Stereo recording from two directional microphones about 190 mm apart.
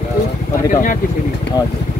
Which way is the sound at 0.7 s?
45° left (ahead or behind).